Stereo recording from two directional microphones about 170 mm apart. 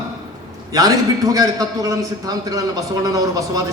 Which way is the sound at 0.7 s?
20° right (ahead or behind).